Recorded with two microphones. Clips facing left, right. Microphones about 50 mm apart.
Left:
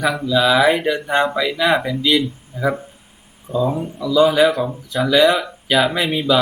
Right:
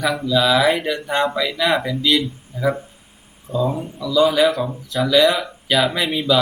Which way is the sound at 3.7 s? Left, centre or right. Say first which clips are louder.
Left 2 dB; left.